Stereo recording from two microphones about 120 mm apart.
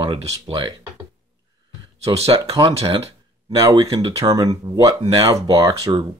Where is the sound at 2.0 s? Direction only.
60° right (ahead or behind).